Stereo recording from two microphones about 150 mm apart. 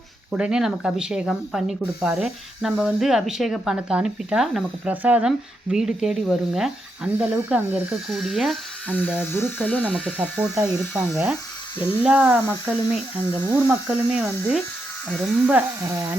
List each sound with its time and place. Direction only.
0.3 s speech: 5° right (ahead or behind)
8.9 s speech: 10° left (ahead or behind); by 16.1 s 15° right (ahead or behind)